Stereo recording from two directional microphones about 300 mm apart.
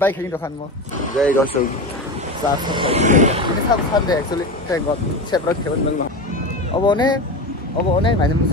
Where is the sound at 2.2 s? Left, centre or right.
Centre.